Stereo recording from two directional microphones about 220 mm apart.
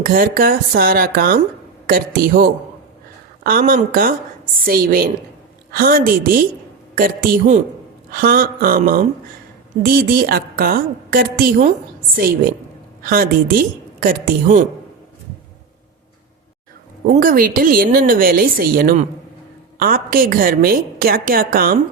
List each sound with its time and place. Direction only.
0.0 s a woman's voice: 40° right (ahead or behind)
17.1 s speech: 40° right (ahead or behind)